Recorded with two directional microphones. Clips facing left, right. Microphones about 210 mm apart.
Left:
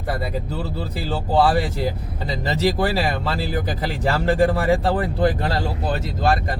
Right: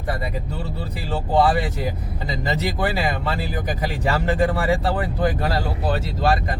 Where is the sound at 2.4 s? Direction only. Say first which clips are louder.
Left 3 dB; 30° left (ahead or behind).